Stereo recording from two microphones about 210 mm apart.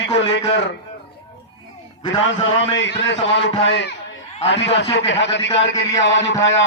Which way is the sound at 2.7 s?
60° left (ahead or behind).